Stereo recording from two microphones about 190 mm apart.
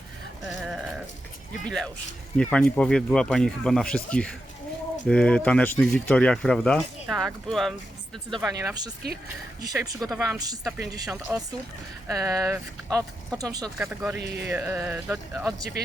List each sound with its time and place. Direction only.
0.4 s sheep: centre (ahead or behind)
1.6 s speech: 5° left (ahead or behind)
8.4 s speech: 15° right (ahead or behind)
13.7 s speech: 5° right (ahead or behind)
14.2 s speech: 60° right (ahead or behind)
14.4 s speech: 10° right (ahead or behind)